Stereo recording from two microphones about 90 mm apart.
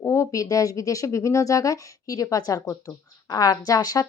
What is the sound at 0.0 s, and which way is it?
A woman's voice, 30° left (ahead or behind).